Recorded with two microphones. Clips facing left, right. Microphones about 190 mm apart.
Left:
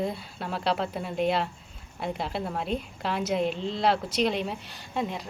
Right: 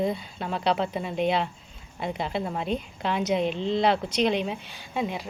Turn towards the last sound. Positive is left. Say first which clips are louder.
# right 1 dB
turn(degrees=-5)  # may be behind; listen again after turning